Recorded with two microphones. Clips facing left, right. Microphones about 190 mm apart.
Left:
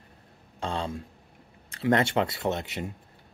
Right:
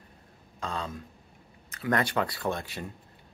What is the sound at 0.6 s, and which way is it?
Speech, 30° left (ahead or behind).